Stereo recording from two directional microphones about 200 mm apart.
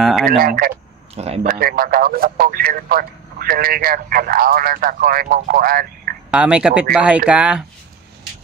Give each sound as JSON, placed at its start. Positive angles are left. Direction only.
{"t": 0.0, "sound": "speech", "side_deg": 0}
{"t": 0.4, "sound": "speech", "side_deg": -45}
{"t": 1.1, "sound": "speech", "side_deg": -30}
{"t": 1.4, "sound": "speech", "side_deg": -45}
{"t": 6.3, "sound": "speech", "side_deg": -5}